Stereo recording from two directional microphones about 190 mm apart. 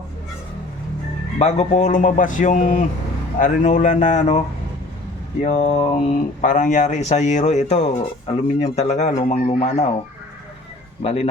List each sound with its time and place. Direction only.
1.4 s a man's voice: 35° left (ahead or behind)
11.0 s a man's voice: 30° left (ahead or behind)